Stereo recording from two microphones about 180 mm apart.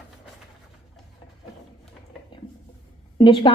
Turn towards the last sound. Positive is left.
turn(degrees=30)  # may be behind; listen again after turning